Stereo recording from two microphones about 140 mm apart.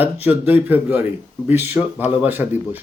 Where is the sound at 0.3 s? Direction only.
15° right (ahead or behind).